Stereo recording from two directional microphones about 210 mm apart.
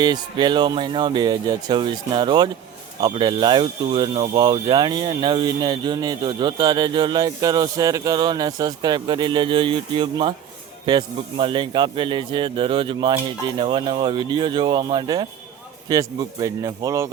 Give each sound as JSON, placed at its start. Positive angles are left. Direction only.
{"t": 0.0, "sound": "speech", "side_deg": -20}